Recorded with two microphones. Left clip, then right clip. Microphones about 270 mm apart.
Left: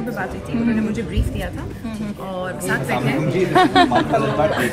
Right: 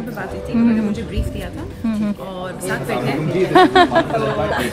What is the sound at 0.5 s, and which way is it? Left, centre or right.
Speech, right.